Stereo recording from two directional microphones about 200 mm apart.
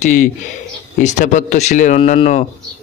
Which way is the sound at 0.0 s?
40° left (ahead or behind).